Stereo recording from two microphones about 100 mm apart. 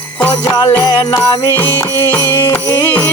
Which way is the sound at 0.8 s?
40° left (ahead or behind).